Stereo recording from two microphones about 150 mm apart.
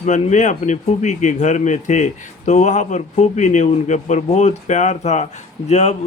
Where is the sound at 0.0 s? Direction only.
55° left (ahead or behind).